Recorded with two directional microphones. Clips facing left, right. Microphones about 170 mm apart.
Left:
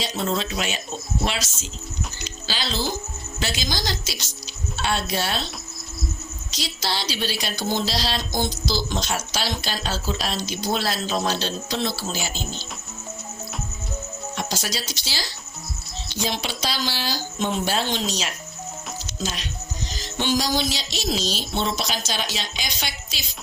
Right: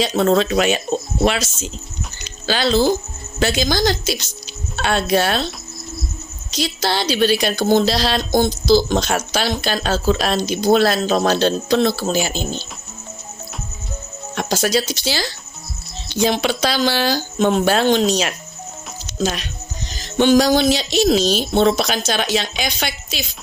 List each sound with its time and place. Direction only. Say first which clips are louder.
0.0 s speech: right 10 dB; 65° right (ahead or behind)
6.5 s speech: right 8 dB; 55° right (ahead or behind)
14.3 s speech: right 11 dB; 55° right (ahead or behind)